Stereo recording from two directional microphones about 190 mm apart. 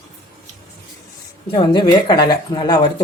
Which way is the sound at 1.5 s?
25° left (ahead or behind).